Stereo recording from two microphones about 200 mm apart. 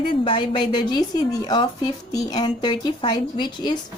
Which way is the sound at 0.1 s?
25° left (ahead or behind).